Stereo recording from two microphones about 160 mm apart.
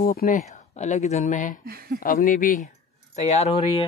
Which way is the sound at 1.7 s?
70° right (ahead or behind).